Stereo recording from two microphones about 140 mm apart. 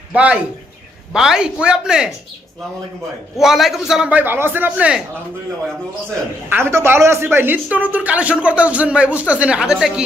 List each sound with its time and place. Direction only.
0.1 s speech: 10° right (ahead or behind)
3.3 s speech: centre (ahead or behind)
6.5 s speech: 20° right (ahead or behind)